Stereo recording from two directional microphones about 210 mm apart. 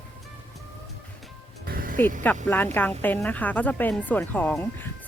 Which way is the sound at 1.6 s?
45° right (ahead or behind).